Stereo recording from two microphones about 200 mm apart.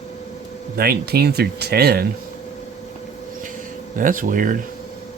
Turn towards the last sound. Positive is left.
turn(degrees=-40)  # may be behind; listen again after turning